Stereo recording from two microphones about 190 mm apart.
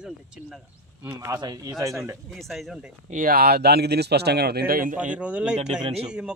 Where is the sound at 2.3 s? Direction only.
Centre (ahead or behind).